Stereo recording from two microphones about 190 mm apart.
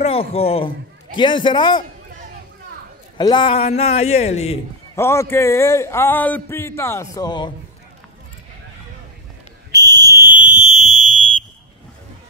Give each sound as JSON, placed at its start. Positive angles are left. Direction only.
{"t": 0.0, "sound": "a man's voice", "side_deg": 30}
{"t": 3.2, "sound": "a man's voice", "side_deg": 25}
{"t": 4.9, "sound": "a man's voice", "side_deg": 15}
{"t": 9.7, "sound": "fire alarm", "side_deg": -20}